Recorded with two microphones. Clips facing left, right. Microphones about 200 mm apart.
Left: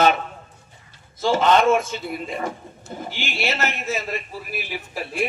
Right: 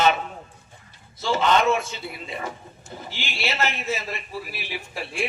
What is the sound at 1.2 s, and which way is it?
A man's voice, 50° left (ahead or behind).